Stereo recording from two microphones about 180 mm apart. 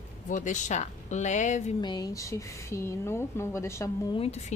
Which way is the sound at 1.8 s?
20° left (ahead or behind).